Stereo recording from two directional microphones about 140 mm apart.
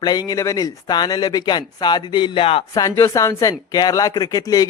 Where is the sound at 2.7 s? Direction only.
20° left (ahead or behind).